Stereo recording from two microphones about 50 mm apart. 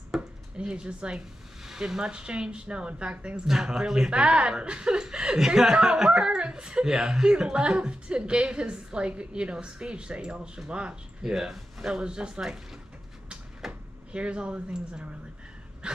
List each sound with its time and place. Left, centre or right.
0.1 s chopping: centre
0.6 s speech: centre
3.4 s speech: centre
11.3 s speech: centre
13.6 s speech: centre
15.8 s a sound: centre